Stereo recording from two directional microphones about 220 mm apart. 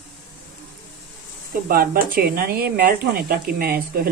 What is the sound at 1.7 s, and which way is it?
Speech, 40° right (ahead or behind).